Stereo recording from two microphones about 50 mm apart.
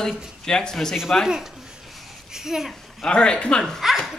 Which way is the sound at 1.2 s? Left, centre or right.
Centre.